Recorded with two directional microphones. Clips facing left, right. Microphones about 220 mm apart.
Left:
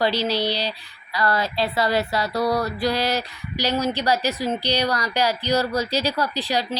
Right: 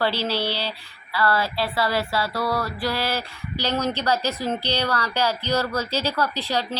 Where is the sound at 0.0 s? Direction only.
15° left (ahead or behind).